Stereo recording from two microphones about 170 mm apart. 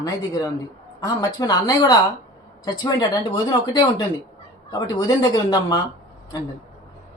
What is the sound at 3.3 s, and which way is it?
Speech, 25° left (ahead or behind).